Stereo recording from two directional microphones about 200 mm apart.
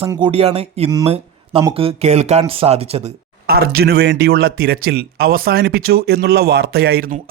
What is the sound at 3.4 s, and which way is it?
Speech, 50° right (ahead or behind).